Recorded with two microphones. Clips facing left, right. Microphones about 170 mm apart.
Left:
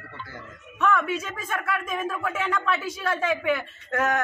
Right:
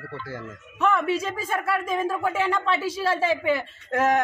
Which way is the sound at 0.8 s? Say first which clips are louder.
Right 2 dB; 30° right (ahead or behind).